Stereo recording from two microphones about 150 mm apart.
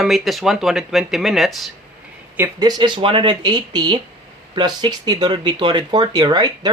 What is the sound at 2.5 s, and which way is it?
Speech, 25° right (ahead or behind).